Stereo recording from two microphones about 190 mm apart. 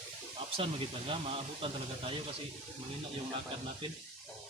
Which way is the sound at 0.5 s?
30° right (ahead or behind).